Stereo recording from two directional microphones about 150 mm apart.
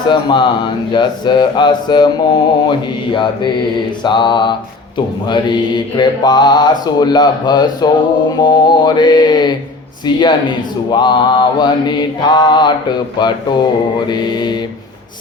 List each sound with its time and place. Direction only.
0.1 s speech: 30° left (ahead or behind)